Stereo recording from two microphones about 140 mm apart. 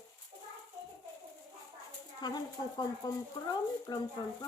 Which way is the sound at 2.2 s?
30° left (ahead or behind).